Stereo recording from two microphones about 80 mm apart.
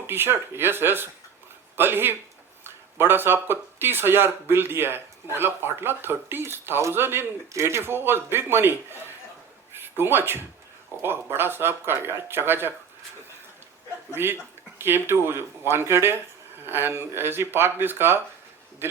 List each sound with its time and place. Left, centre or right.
0.1 s a man's voice: right
14.1 s speech: right